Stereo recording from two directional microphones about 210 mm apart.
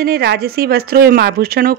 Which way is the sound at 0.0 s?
50° right (ahead or behind).